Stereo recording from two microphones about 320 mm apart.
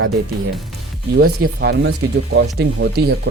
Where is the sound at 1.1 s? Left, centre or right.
Right.